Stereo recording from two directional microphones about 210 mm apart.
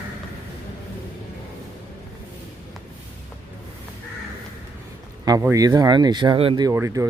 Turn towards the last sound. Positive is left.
turn(degrees=-15)  # may be behind; listen again after turning